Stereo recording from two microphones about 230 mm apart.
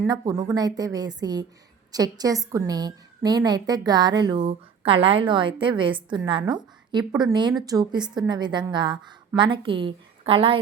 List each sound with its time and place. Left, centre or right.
0.0 s a woman's voice: centre